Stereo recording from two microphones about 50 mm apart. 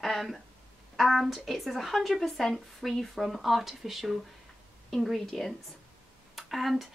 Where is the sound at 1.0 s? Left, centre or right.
Centre.